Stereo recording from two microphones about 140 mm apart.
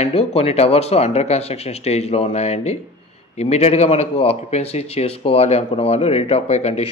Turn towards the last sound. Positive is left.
turn(degrees=50)  # may be behind; listen again after turning